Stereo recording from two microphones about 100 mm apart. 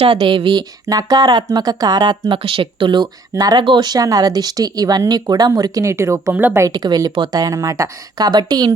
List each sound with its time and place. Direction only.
0.0 s speech: 65° right (ahead or behind)
0.9 s speech: 40° right (ahead or behind)
2.4 s speech: 60° right (ahead or behind); by 3.6 s 40° right (ahead or behind)
3.6 s speech: 50° right (ahead or behind)